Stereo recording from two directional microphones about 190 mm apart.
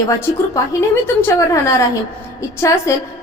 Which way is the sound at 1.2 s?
15° left (ahead or behind).